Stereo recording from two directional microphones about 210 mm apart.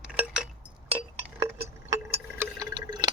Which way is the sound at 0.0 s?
5° right (ahead or behind).